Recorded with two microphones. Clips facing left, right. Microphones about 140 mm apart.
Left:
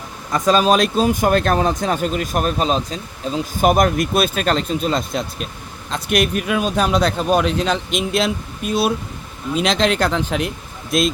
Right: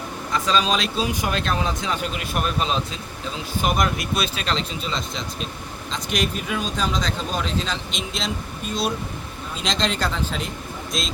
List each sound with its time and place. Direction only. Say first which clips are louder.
0.3 s speech: left 7 dB; 50° left (ahead or behind)
5.9 s speech: left 7 dB; 60° left (ahead or behind)